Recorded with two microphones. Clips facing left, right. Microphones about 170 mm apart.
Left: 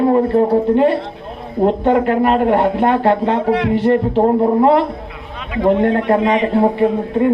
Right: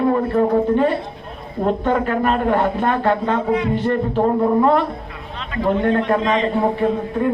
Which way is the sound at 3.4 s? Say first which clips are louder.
Left 4 dB; 75° left (ahead or behind).